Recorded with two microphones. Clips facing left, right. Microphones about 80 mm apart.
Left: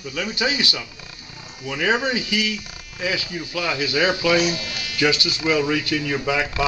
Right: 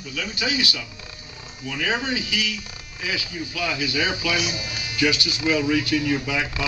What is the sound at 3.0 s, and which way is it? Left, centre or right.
Speech, left.